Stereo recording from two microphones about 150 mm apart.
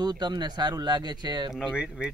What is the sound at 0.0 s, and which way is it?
Speech, 30° right (ahead or behind).